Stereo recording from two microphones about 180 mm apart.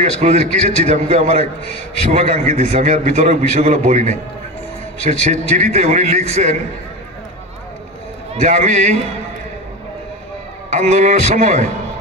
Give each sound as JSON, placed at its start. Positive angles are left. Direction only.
{"t": 0.0, "sound": "a man's voice", "side_deg": -40}
{"t": 8.4, "sound": "a man's voice", "side_deg": -40}
{"t": 10.7, "sound": "a man's voice", "side_deg": -40}